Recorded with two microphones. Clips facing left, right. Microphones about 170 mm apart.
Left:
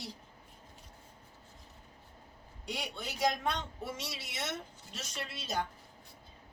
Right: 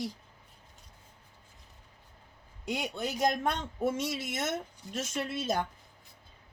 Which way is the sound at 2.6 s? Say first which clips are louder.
Right 7 dB; 45° right (ahead or behind).